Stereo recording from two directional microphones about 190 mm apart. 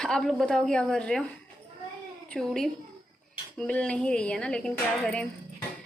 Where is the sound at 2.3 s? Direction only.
Centre (ahead or behind).